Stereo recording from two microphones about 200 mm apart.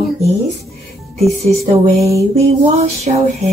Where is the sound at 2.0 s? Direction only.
15° right (ahead or behind).